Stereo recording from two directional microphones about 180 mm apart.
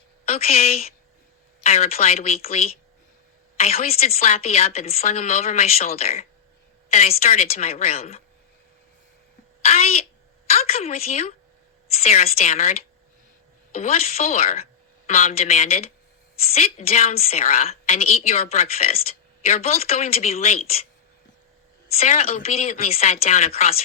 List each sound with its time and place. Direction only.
0.3 s a woman's voice: 35° left (ahead or behind)
7.2 s a woman's voice: 35° left (ahead or behind)
9.6 s a woman's voice: 35° left (ahead or behind)
13.8 s a woman's voice: 35° left (ahead or behind)
21.9 s a woman's voice: 35° left (ahead or behind)